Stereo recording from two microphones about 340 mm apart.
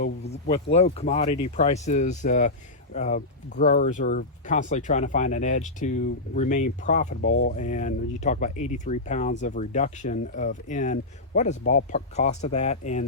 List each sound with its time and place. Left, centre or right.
0.0 s speech: centre